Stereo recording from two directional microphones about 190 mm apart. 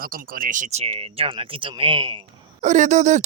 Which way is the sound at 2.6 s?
40° right (ahead or behind).